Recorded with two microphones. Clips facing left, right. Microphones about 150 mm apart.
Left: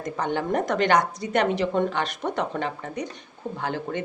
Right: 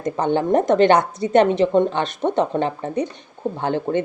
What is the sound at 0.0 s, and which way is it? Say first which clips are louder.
Speech: right 7 dB; 25° right (ahead or behind).